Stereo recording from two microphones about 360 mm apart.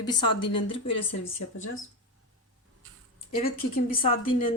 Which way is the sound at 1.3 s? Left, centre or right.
Left.